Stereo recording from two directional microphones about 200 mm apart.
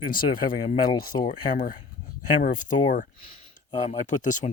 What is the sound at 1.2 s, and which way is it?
Speech, 40° left (ahead or behind).